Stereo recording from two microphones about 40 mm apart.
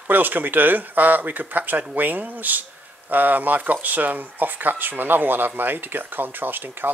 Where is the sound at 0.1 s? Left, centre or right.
Right.